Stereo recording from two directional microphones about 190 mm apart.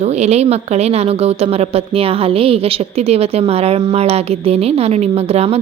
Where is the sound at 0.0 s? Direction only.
35° right (ahead or behind).